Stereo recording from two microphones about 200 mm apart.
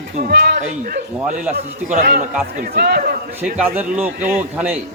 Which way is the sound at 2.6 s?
50° right (ahead or behind).